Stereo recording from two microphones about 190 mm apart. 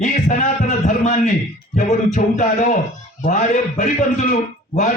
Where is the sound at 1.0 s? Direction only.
40° left (ahead or behind).